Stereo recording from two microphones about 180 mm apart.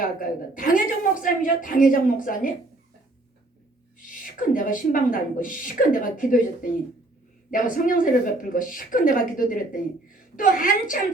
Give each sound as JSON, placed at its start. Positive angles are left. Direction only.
{"t": 0.0, "sound": "a woman's voice", "side_deg": 50}
{"t": 4.0, "sound": "a woman's voice", "side_deg": 50}